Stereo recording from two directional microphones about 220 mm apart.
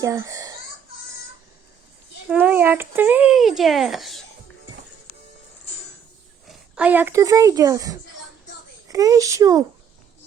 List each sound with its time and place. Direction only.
0.0 s babbling: 15° right (ahead or behind)
2.3 s a child's voice: 5° right (ahead or behind)
6.7 s speech: 5° right (ahead or behind)